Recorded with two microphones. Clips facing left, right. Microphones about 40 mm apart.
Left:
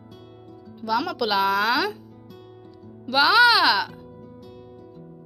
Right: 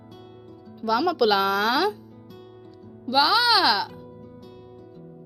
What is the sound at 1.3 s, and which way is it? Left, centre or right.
Speech, centre.